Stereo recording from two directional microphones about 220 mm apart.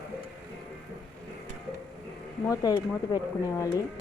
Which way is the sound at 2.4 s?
15° left (ahead or behind).